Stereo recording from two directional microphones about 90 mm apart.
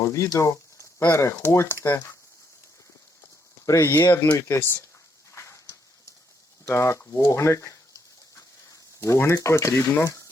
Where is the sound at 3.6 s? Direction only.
35° left (ahead or behind).